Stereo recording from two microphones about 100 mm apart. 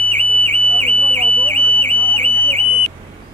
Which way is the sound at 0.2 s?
65° right (ahead or behind).